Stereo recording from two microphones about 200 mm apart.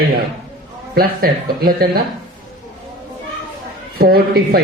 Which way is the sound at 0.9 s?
50° right (ahead or behind).